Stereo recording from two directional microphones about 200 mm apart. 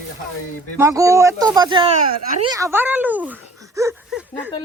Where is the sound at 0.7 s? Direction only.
15° right (ahead or behind).